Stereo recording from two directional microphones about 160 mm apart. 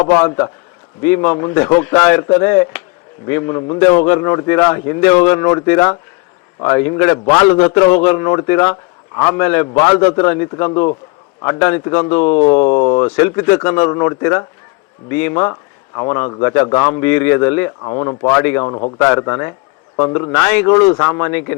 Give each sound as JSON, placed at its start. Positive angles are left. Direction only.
{"t": 0.0, "sound": "a man's voice", "side_deg": 15}
{"t": 11.6, "sound": "a man's voice", "side_deg": 15}
{"t": 17.8, "sound": "speech", "side_deg": 25}
{"t": 18.3, "sound": "a man's voice", "side_deg": 15}
{"t": 18.6, "sound": "speech", "side_deg": 30}
{"t": 18.9, "sound": "a man's voice", "side_deg": 10}
{"t": 19.2, "sound": "speech", "side_deg": 20}
{"t": 20.3, "sound": "a man's voice", "side_deg": 10}